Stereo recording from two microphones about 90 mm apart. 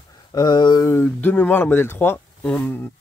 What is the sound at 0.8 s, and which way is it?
Speech, 25° left (ahead or behind).